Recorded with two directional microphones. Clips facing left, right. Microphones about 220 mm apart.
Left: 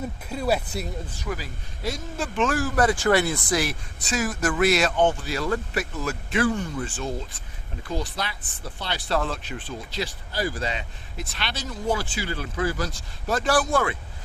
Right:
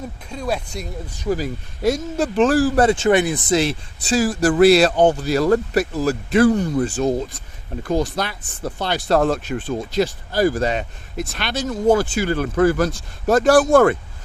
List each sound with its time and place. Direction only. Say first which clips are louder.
0.3 s speech: even; 5° left (ahead or behind)
1.3 s speech: right 12 dB; 45° right (ahead or behind)